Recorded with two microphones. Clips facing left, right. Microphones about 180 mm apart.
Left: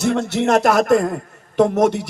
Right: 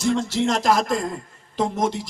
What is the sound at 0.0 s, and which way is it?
A man's voice, 65° left (ahead or behind).